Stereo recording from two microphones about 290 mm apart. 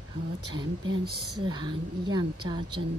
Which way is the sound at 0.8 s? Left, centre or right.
Right.